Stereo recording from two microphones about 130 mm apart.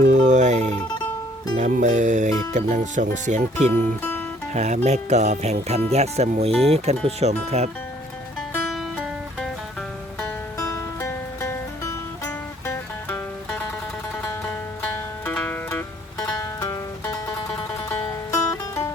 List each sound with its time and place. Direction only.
0.1 s music: 65° right (ahead or behind)
2.6 s speech: 65° right (ahead or behind)
3.7 s speech: 15° left (ahead or behind)
4.5 s speech: 65° right (ahead or behind)
6.7 s speech: 50° right (ahead or behind)
8.7 s music: centre (ahead or behind)
10.2 s music: 20° left (ahead or behind)
14.8 s music: 15° left (ahead or behind)
18.5 s music: 20° left (ahead or behind)